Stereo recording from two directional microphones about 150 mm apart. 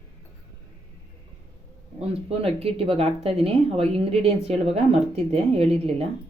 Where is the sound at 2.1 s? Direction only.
40° right (ahead or behind).